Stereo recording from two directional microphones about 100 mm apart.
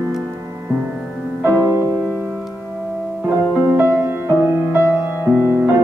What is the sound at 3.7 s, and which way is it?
Music, 25° right (ahead or behind).